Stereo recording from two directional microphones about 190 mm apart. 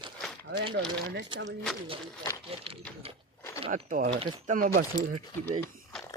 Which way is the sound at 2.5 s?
30° right (ahead or behind).